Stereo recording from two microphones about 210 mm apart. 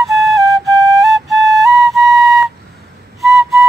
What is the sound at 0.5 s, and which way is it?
Flute, 15° right (ahead or behind).